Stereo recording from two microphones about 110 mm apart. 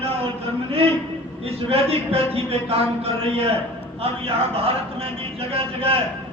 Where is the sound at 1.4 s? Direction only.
60° right (ahead or behind).